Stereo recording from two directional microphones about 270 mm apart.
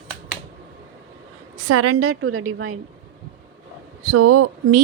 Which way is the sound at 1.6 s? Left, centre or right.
Right.